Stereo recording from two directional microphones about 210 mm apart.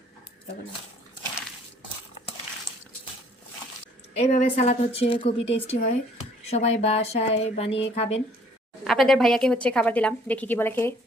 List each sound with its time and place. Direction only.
4.1 s a woman's voice: 30° left (ahead or behind)
8.8 s a woman's voice: centre (ahead or behind)